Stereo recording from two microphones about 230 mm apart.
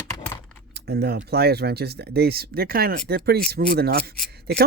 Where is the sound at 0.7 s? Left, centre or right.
Right.